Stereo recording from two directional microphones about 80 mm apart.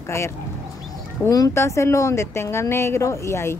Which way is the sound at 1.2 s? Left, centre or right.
Left.